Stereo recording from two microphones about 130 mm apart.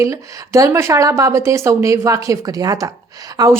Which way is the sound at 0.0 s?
25° right (ahead or behind).